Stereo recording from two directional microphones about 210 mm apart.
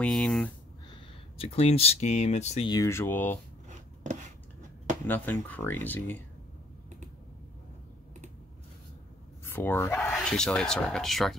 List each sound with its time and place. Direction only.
0.0 s speech: 5° left (ahead or behind)
1.4 s speech: 30° left (ahead or behind)
2.7 s speech: 15° left (ahead or behind)
3.6 s a sound: 35° right (ahead or behind)
5.0 s speech: 10° left (ahead or behind)
9.4 s speech: 10° left (ahead or behind)